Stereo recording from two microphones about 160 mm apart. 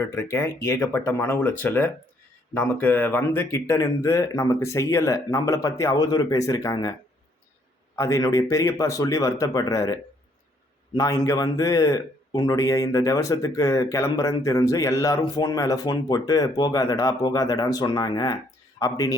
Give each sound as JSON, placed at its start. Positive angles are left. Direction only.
{"t": 0.2, "sound": "a man's voice", "side_deg": 15}
{"t": 7.9, "sound": "a man's voice", "side_deg": 20}
{"t": 10.9, "sound": "a man's voice", "side_deg": 20}